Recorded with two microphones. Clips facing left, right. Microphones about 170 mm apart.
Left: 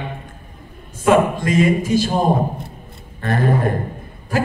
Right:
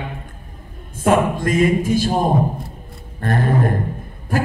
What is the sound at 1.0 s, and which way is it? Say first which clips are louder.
A man's voice: left 1 dB; 50° right (ahead or behind).